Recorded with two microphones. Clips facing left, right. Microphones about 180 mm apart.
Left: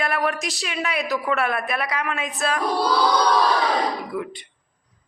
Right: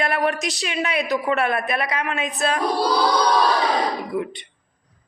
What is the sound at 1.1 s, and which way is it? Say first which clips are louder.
Speech: right 2 dB; 25° right (ahead or behind).